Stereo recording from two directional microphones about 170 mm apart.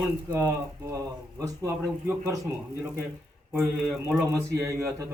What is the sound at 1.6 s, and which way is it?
Speech, 15° right (ahead or behind).